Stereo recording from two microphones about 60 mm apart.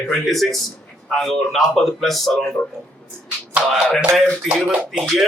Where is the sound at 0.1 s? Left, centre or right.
Centre.